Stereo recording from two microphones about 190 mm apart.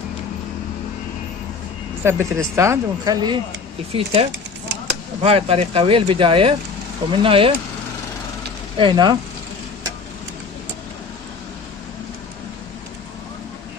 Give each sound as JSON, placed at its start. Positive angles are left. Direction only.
{"t": 2.0, "sound": "speech", "side_deg": -15}
{"t": 3.9, "sound": "speech", "side_deg": -30}
{"t": 8.7, "sound": "speech", "side_deg": -25}